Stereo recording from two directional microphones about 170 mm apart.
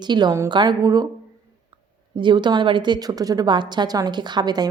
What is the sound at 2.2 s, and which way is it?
A woman's voice, 25° right (ahead or behind).